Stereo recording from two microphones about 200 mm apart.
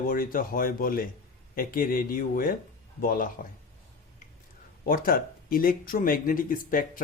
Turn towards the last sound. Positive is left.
turn(degrees=45)  # may be behind; listen again after turning